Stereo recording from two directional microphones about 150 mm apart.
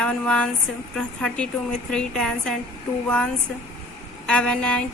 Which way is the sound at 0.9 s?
5° left (ahead or behind).